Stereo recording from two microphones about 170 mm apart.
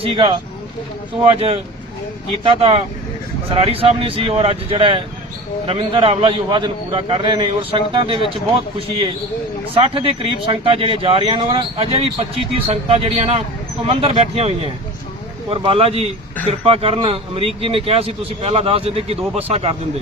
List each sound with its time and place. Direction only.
0.0 s speech: 35° right (ahead or behind)